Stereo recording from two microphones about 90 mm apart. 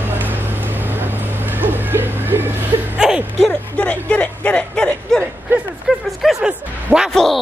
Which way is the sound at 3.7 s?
15° left (ahead or behind).